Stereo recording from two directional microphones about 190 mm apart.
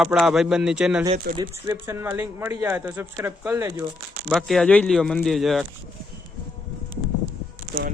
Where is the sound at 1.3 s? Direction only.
20° right (ahead or behind).